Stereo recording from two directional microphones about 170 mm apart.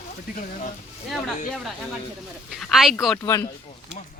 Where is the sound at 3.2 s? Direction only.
20° left (ahead or behind).